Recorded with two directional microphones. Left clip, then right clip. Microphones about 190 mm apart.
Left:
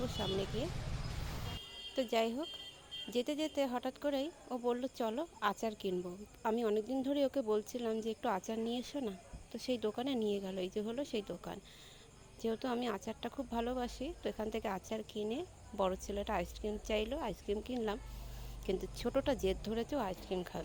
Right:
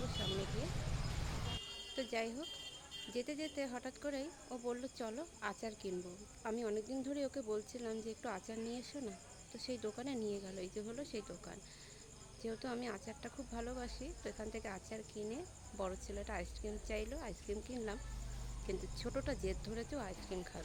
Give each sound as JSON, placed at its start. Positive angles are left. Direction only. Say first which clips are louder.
{"t": 0.0, "sound": "vehicle", "louder": "left 4 dB", "side_deg": 0}
{"t": 2.0, "sound": "speech", "louder": "left 7 dB", "side_deg": 35}